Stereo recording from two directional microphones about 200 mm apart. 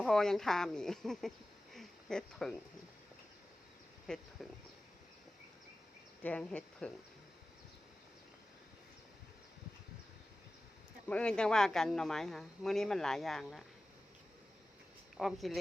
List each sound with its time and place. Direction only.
0.0 s speech: centre (ahead or behind)
1.7 s a sound: centre (ahead or behind)
4.0 s speech: centre (ahead or behind)
6.2 s speech: 5° left (ahead or behind)
11.1 s speech: 5° left (ahead or behind)
15.2 s speech: centre (ahead or behind)